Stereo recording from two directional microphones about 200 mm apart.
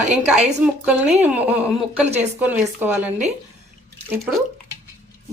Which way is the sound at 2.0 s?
35° right (ahead or behind).